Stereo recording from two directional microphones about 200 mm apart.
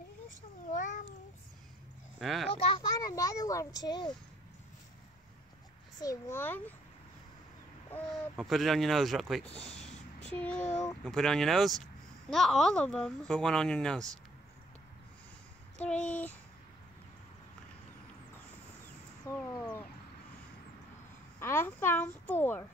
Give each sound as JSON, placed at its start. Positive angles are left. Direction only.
{"t": 0.7, "sound": "cat", "side_deg": 40}
{"t": 2.1, "sound": "a child's voice", "side_deg": 0}
{"t": 2.5, "sound": "a child's voice", "side_deg": 25}
{"t": 5.9, "sound": "a woman's voice", "side_deg": 15}
{"t": 7.9, "sound": "a woman's voice", "side_deg": 0}
{"t": 15.8, "sound": "a woman's voice", "side_deg": 5}
{"t": 19.3, "sound": "a sound", "side_deg": 15}
{"t": 21.4, "sound": "a woman's voice", "side_deg": 10}